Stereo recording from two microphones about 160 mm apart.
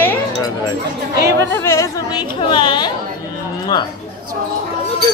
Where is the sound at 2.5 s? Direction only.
30° left (ahead or behind).